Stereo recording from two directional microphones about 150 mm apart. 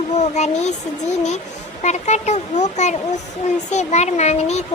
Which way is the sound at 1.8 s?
50° left (ahead or behind).